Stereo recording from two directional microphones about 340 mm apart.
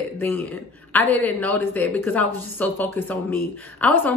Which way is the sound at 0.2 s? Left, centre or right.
Centre.